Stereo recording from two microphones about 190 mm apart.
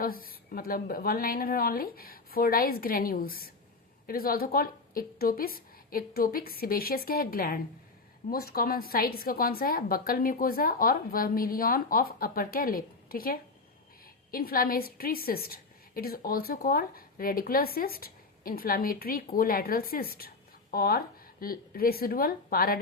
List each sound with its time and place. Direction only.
0.0 s a woman's voice: 50° left (ahead or behind)